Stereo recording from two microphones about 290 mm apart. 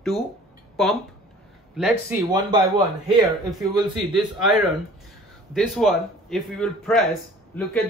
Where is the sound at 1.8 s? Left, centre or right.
Centre.